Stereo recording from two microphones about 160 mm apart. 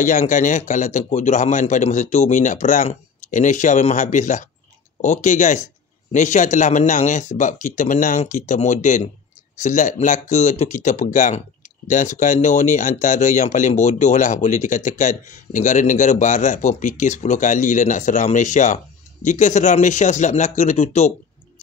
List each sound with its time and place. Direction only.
0.0 s speech: 50° left (ahead or behind)